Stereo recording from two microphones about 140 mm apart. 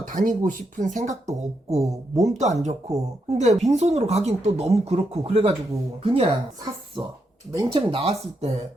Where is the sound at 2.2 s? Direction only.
55° right (ahead or behind).